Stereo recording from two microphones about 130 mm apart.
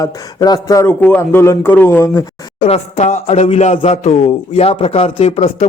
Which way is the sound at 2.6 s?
55° left (ahead or behind).